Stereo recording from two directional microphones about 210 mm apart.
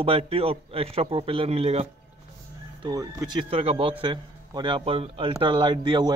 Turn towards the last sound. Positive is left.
turn(degrees=-20)  # may be behind; listen again after turning